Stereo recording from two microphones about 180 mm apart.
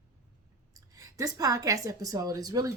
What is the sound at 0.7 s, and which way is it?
A woman's voice, 20° right (ahead or behind).